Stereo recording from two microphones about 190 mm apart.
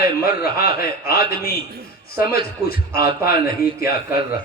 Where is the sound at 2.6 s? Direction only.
55° left (ahead or behind).